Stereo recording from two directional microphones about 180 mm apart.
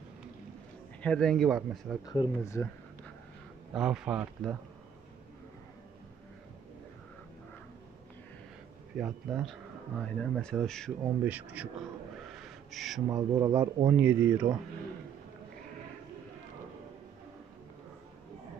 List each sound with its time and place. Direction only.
1.0 s speech: 5° left (ahead or behind)
2.0 s speech: 20° left (ahead or behind)
3.7 s speech: 5° right (ahead or behind)
8.9 s speech: centre (ahead or behind)
11.2 s speech: 10° right (ahead or behind)
12.4 s a sound: centre (ahead or behind)
13.1 s speech: 20° right (ahead or behind)
13.9 s speech: 10° right (ahead or behind)